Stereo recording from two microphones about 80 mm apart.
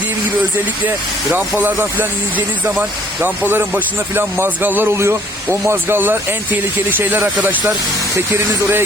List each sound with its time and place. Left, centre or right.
0.9 s speech: right